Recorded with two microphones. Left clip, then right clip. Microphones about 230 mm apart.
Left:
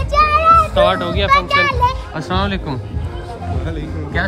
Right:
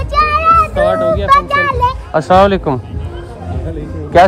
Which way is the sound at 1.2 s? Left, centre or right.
Centre.